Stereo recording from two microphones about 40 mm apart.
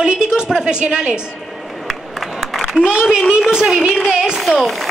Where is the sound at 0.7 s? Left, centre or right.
Right.